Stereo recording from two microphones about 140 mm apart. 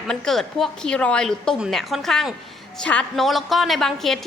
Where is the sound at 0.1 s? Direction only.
Centre (ahead or behind).